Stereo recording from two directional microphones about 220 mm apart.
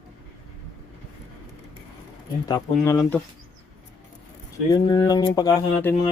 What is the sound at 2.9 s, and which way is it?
Speech, 10° left (ahead or behind).